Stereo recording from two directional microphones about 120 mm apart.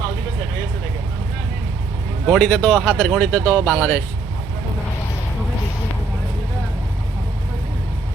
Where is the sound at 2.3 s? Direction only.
5° left (ahead or behind).